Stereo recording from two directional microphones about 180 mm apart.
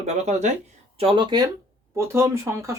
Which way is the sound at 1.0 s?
30° right (ahead or behind).